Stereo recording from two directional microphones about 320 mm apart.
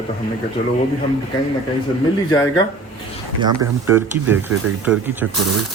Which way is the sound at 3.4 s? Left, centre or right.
Centre.